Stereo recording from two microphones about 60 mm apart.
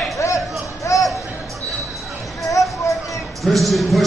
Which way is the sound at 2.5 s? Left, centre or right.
Left.